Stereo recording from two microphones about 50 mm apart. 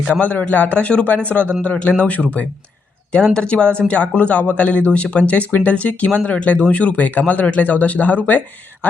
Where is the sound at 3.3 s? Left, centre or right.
Left.